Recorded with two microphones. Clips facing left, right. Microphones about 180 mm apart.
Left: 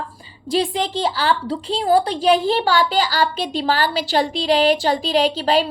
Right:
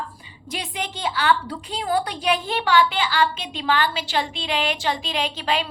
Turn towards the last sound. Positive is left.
turn(degrees=35)  # may be behind; listen again after turning